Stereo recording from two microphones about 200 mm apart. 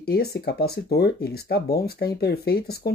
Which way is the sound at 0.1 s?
55° left (ahead or behind).